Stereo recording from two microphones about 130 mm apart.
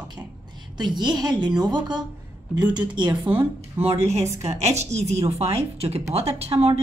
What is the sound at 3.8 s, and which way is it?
A woman's voice, 55° right (ahead or behind).